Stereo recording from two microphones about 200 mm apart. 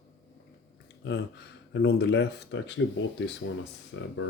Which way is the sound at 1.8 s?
55° left (ahead or behind).